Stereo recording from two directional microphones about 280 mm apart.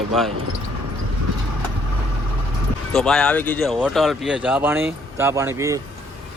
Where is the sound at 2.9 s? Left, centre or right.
Centre.